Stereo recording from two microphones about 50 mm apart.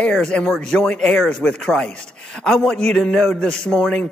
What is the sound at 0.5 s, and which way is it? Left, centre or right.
A man's voice, centre.